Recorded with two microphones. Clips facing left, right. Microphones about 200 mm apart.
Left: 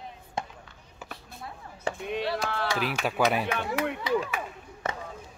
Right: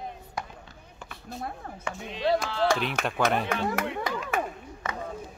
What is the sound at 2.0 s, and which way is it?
Speech, 55° left (ahead or behind).